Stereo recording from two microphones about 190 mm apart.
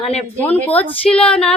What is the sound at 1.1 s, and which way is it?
Child singing, 5° left (ahead or behind).